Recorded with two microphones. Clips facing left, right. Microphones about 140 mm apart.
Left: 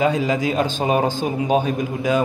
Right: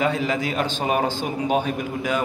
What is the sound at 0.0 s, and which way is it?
A man's voice, 15° left (ahead or behind).